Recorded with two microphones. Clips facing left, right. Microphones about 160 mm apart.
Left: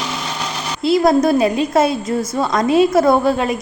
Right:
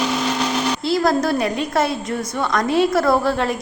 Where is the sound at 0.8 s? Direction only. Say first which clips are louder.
Left 7 dB; 20° left (ahead or behind).